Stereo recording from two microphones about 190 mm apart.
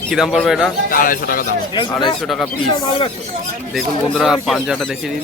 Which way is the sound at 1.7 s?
25° left (ahead or behind).